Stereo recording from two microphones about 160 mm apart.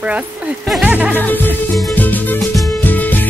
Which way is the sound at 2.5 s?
Centre (ahead or behind).